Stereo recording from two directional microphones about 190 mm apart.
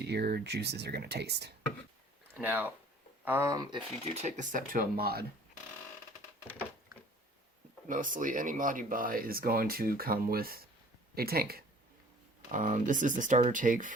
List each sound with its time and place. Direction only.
0.0 s speech: 55° right (ahead or behind)
2.3 s speech: 10° right (ahead or behind)
4.0 s speech: 35° right (ahead or behind); by 5.2 s 55° right (ahead or behind)
7.9 s speech: 45° right (ahead or behind)
12.5 s speech: 45° right (ahead or behind)